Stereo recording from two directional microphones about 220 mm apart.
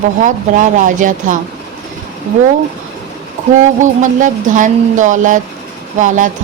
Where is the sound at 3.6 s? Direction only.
35° right (ahead or behind).